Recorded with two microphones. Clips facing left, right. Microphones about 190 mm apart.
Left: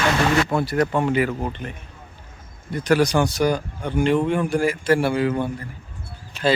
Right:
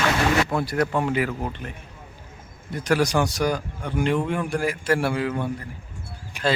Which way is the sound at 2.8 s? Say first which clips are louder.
Left 3 dB; centre (ahead or behind).